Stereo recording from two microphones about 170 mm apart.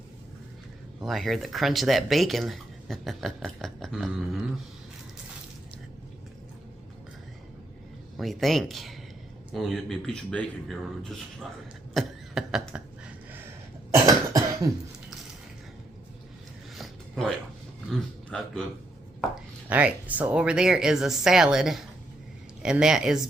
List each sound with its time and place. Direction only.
1.0 s speech: centre (ahead or behind)
8.1 s speech: centre (ahead or behind)
11.9 s a sound: centre (ahead or behind)
13.9 s cough: 20° right (ahead or behind)
16.7 s a sound: centre (ahead or behind)
19.6 s speech: 10° right (ahead or behind)